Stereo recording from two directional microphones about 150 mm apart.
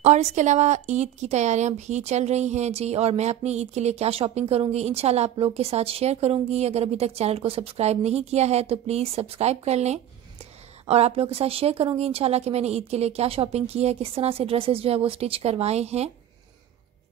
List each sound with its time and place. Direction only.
0.0 s speech: 50° right (ahead or behind)